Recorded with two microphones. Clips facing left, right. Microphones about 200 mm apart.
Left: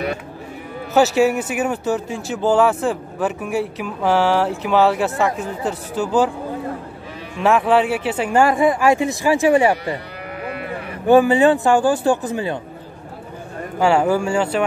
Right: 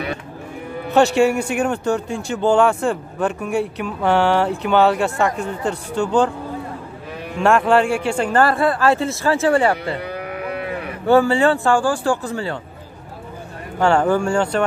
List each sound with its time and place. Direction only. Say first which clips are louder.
0.8 s speech: even; 5° left (ahead or behind)
7.4 s speech: even; centre (ahead or behind)
11.1 s speech: left 2 dB; 15° left (ahead or behind)
13.7 s speech: even; 5° left (ahead or behind)